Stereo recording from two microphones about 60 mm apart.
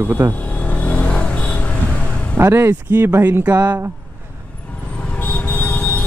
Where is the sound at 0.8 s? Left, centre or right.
Left.